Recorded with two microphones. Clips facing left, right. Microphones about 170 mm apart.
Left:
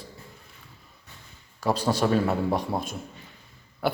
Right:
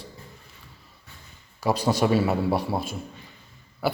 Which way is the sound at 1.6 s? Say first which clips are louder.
Right 2 dB; 10° right (ahead or behind).